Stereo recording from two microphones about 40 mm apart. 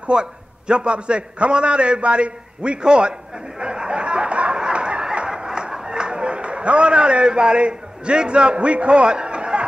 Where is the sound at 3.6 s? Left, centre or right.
Right.